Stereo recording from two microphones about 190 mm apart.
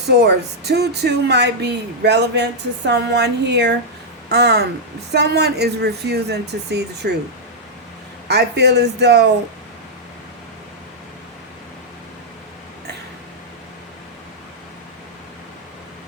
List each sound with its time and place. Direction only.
0.1 s speech: 60° right (ahead or behind)
8.3 s speech: 60° right (ahead or behind)